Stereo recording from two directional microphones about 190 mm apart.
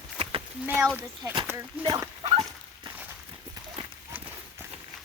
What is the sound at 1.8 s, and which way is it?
Speech, 20° right (ahead or behind).